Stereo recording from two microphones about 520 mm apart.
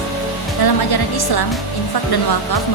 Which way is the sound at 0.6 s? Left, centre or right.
Left.